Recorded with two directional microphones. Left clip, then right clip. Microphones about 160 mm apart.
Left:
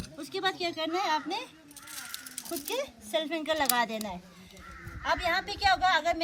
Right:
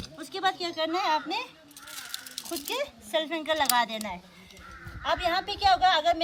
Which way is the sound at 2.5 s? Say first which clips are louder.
Right 2 dB; 10° right (ahead or behind).